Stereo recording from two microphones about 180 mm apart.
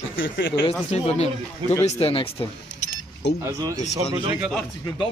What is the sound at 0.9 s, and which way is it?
Speech, 35° left (ahead or behind).